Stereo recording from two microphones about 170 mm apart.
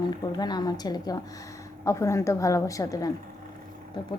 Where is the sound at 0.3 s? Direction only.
25° left (ahead or behind).